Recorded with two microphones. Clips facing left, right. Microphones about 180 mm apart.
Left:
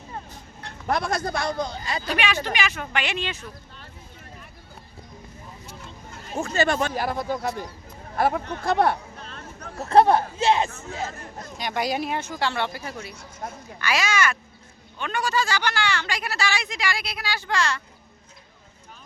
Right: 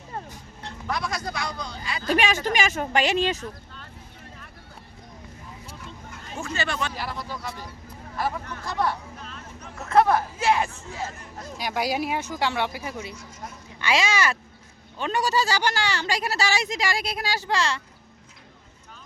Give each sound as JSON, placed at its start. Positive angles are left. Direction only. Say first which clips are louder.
{"t": 0.6, "sound": "speech", "louder": "left 4 dB", "side_deg": 55}
{"t": 2.0, "sound": "speech", "louder": "right 4 dB", "side_deg": -45}
{"t": 6.3, "sound": "speech", "louder": "left 7 dB", "side_deg": 40}
{"t": 9.7, "sound": "speech", "louder": "left 3 dB", "side_deg": 35}
{"t": 11.5, "sound": "speech", "louder": "even", "side_deg": -5}
{"t": 13.4, "sound": "speech", "louder": "left 5 dB", "side_deg": 50}
{"t": 13.7, "sound": "speech", "louder": "right 1 dB", "side_deg": -25}